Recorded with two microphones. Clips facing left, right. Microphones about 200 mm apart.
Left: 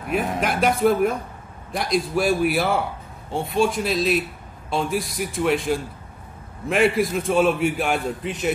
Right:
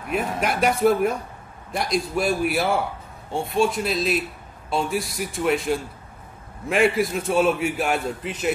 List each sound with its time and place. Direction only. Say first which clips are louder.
0.1 s a man's voice: left 1 dB; centre (ahead or behind)
6.9 s a man's voice: left 1 dB; centre (ahead or behind)